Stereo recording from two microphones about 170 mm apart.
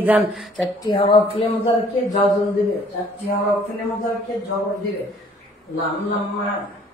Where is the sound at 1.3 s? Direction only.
40° left (ahead or behind).